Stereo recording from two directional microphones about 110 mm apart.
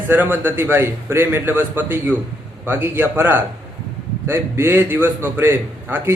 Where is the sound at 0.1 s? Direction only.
20° right (ahead or behind).